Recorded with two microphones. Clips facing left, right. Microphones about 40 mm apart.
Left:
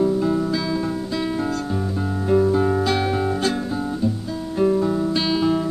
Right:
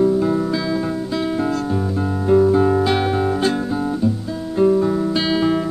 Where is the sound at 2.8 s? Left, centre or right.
Centre.